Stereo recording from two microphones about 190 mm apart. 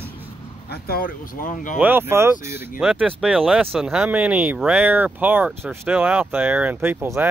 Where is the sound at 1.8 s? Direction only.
10° right (ahead or behind).